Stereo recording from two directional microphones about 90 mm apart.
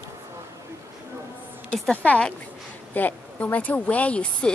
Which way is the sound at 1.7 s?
15° left (ahead or behind).